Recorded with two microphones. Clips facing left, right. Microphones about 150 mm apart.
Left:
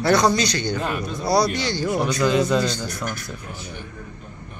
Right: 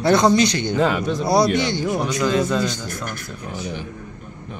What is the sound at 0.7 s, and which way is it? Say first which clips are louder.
Speech: right 7 dB; 90° right.